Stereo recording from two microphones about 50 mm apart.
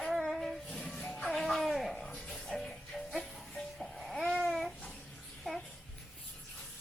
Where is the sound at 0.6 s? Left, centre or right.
Centre.